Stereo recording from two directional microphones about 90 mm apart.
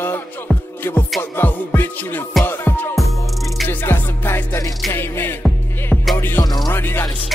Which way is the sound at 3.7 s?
25° left (ahead or behind).